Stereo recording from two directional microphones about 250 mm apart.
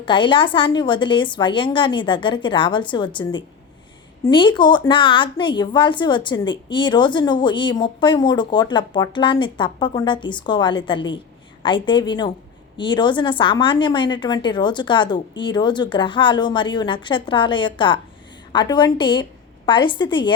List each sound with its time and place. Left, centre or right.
0.0 s a woman's voice: centre